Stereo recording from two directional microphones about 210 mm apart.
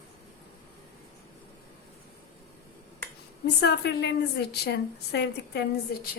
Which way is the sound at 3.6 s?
55° left (ahead or behind).